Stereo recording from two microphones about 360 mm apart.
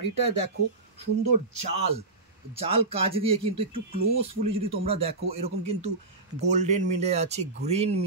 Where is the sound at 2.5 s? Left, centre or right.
Centre.